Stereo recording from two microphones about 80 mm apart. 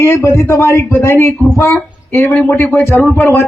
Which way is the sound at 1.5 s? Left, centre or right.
Left.